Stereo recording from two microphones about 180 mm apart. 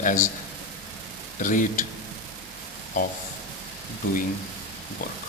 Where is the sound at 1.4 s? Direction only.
45° left (ahead or behind).